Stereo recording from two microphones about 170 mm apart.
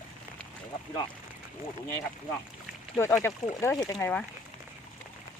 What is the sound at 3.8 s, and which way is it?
Speech, 20° left (ahead or behind).